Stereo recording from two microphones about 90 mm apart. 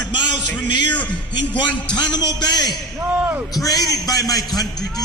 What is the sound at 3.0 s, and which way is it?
Speech, 20° right (ahead or behind).